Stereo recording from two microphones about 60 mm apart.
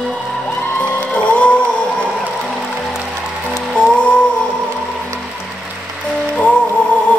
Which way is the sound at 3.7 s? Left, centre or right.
Centre.